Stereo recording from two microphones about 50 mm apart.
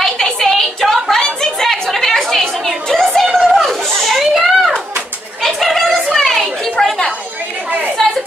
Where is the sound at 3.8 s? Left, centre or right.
Centre.